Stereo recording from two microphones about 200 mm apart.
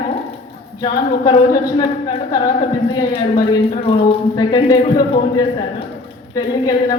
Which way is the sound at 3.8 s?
25° left (ahead or behind).